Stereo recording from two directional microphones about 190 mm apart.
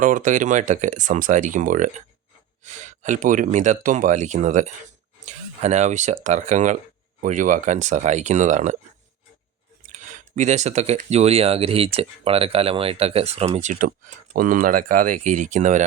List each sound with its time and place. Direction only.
0.0 s speech: 45° right (ahead or behind)
9.8 s speech: 40° right (ahead or behind)